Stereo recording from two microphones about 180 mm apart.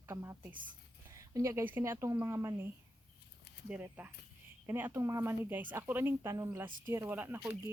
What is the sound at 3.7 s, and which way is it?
Speech, 10° right (ahead or behind).